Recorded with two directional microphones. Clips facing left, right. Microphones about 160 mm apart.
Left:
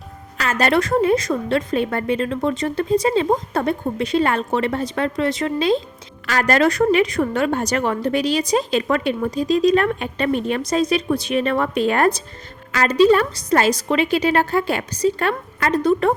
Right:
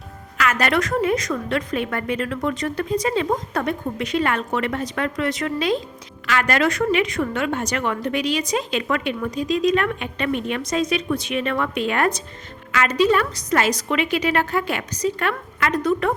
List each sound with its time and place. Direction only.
0.3 s a woman's voice: 30° left (ahead or behind)